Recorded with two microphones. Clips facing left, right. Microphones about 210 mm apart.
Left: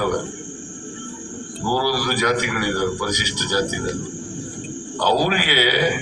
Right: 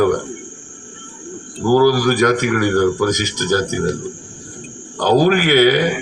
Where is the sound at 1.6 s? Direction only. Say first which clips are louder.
Right 9 dB; 45° right (ahead or behind).